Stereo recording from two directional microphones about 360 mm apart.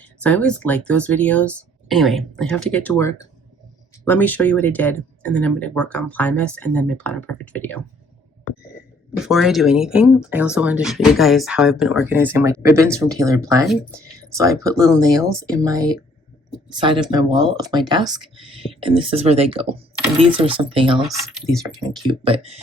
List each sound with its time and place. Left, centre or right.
0.0 s speech: centre
9.1 s speech: centre